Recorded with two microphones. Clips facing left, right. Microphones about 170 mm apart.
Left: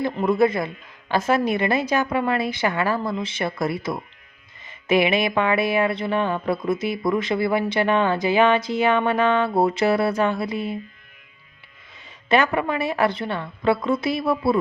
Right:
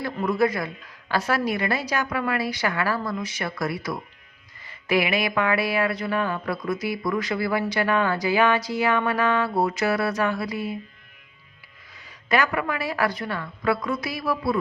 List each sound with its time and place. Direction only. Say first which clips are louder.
0.0 s speech: left 4 dB; 20° left (ahead or behind)
12.3 s speech: left 4 dB; 25° left (ahead or behind)